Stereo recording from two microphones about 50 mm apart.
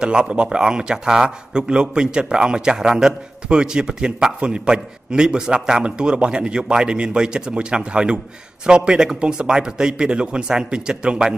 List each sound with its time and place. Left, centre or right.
0.0 s speech: centre